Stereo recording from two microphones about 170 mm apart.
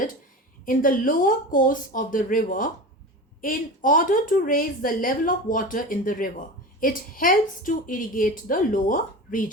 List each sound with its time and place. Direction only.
0.6 s a woman's voice: 55° left (ahead or behind)